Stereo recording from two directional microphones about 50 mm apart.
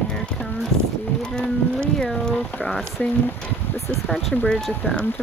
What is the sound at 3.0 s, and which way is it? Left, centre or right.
Speech, left.